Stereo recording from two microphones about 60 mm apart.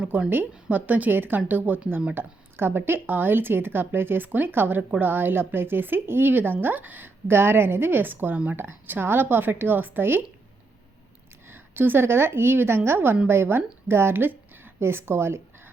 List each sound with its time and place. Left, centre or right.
0.0 s a woman's voice: right
2.1 s speech: right
11.4 s a woman's voice: right